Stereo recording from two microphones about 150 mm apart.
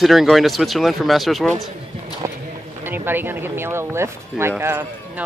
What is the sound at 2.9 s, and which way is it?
Speech, 15° right (ahead or behind).